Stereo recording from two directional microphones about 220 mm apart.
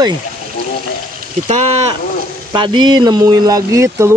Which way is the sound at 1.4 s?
30° right (ahead or behind).